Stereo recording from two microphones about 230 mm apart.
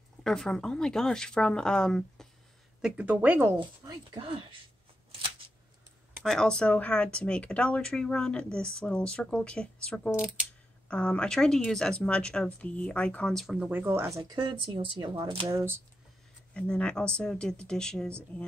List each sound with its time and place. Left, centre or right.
0.2 s speech: centre
6.2 s speech: centre
16.5 s speech: centre